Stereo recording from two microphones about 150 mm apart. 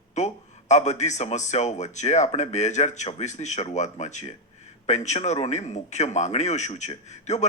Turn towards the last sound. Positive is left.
turn(degrees=50)  # may be behind; listen again after turning